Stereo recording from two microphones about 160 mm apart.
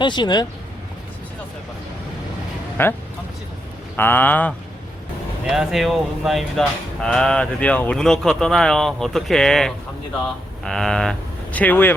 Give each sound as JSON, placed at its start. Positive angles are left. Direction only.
{"t": 0.0, "sound": "speech", "side_deg": 30}
{"t": 2.8, "sound": "speech", "side_deg": 15}
{"t": 5.5, "sound": "speech", "side_deg": 0}